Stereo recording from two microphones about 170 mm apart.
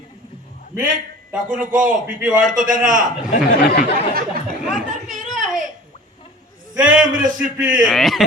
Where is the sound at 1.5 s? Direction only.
50° right (ahead or behind).